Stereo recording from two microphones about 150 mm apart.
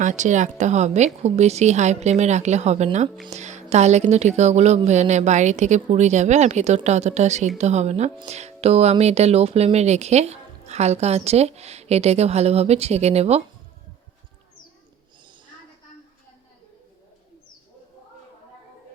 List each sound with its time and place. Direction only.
0.0 s speech: 55° right (ahead or behind)